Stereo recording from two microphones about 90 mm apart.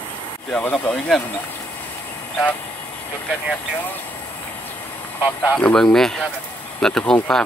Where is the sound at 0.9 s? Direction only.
5° left (ahead or behind).